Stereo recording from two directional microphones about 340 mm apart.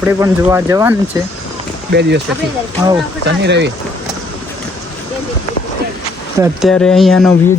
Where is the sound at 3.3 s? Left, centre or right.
Right.